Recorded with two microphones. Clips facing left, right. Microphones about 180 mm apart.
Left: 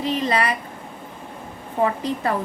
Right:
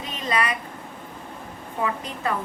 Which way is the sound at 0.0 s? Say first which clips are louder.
Left 5 dB; 35° left (ahead or behind).